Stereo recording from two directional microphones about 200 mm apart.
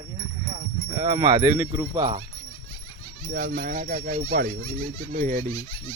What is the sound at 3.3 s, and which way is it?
Speech, 45° right (ahead or behind).